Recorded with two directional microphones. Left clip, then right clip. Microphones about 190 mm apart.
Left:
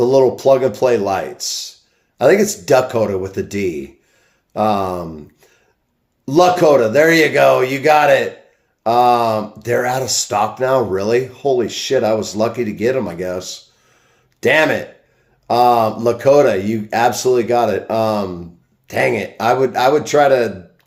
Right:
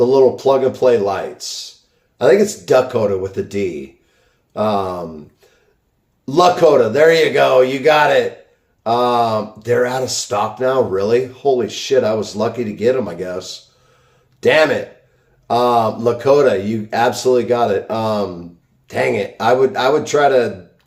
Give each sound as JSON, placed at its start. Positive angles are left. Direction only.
{"t": 0.0, "sound": "speech", "side_deg": 35}
{"t": 6.2, "sound": "speech", "side_deg": 30}